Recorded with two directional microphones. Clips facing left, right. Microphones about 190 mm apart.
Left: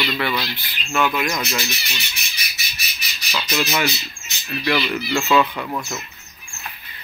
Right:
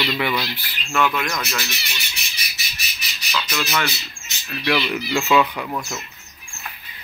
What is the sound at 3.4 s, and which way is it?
Speech, 25° left (ahead or behind).